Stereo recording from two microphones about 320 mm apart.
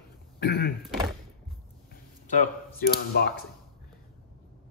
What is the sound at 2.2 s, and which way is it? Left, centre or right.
Speech, left.